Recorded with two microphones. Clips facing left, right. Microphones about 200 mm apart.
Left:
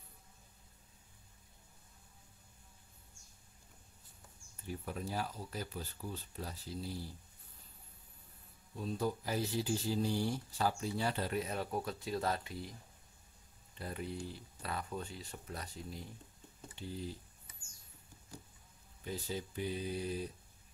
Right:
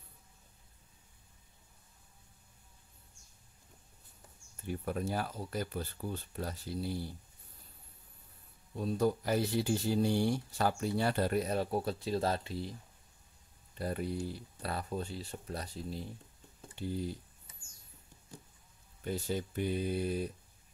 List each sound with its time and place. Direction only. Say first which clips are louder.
4.6 s speech: right 6 dB; 60° right (ahead or behind)
8.7 s speech: right 6 dB; 60° right (ahead or behind); by 12.7 s 30° right (ahead or behind)
13.7 s speech: right 6 dB; 40° right (ahead or behind)
19.0 s speech: right 5 dB; 60° right (ahead or behind)